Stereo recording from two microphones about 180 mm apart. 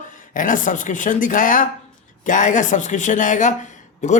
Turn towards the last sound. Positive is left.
turn(degrees=45)  # may be behind; listen again after turning